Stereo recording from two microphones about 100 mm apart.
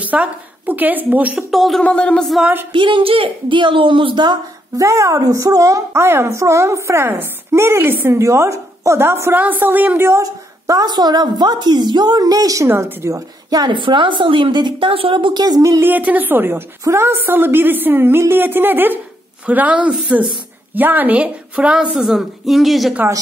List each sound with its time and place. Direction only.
0.0 s a woman's voice: 15° right (ahead or behind)
1.5 s speech: centre (ahead or behind)
1.8 s music: 10° left (ahead or behind)
2.7 s a woman's voice: 55° right (ahead or behind)
4.7 s a woman's voice: 30° right (ahead or behind)
10.2 s a woman's voice: 40° right (ahead or behind)
13.7 s a woman's voice: 55° right (ahead or behind); by 15.8 s 40° right (ahead or behind)
15.8 s a woman's voice: 15° right (ahead or behind); by 22.9 s centre (ahead or behind)